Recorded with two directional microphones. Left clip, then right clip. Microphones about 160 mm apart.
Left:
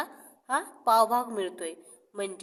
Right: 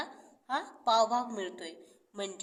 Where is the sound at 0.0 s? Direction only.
40° left (ahead or behind).